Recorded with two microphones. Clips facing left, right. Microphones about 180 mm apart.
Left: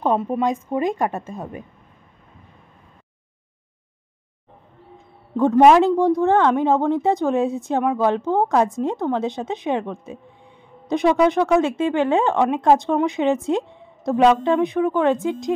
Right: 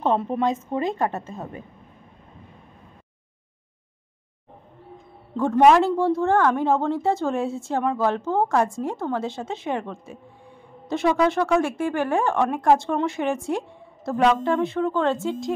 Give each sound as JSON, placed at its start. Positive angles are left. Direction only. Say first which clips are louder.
{"t": 0.0, "sound": "speech", "louder": "left 2 dB", "side_deg": 10}
{"t": 5.3, "sound": "speech", "louder": "left 3 dB", "side_deg": 15}